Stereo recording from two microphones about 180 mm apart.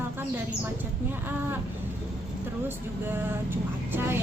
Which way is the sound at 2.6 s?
10° right (ahead or behind).